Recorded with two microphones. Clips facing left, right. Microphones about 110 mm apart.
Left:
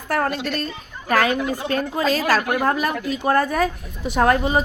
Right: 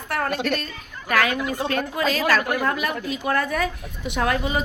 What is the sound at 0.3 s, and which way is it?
Speech, 50° right (ahead or behind).